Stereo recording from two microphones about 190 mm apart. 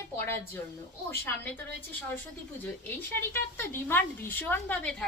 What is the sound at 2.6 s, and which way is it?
Speech, 10° left (ahead or behind).